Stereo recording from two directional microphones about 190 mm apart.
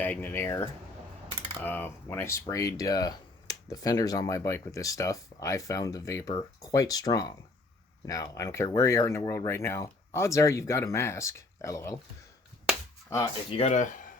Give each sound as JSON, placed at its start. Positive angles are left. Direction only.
{"t": 0.0, "sound": "speech", "side_deg": 10}
{"t": 1.6, "sound": "speech", "side_deg": 10}
{"t": 13.5, "sound": "speech", "side_deg": 35}